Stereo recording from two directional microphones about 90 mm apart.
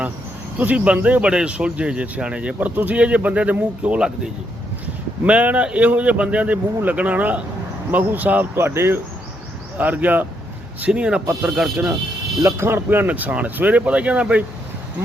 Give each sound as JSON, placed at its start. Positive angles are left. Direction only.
{"t": 0.6, "sound": "speech", "side_deg": -15}
{"t": 12.4, "sound": "speech", "side_deg": -30}